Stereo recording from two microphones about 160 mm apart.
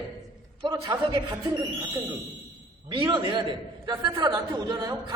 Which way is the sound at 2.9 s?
30° right (ahead or behind).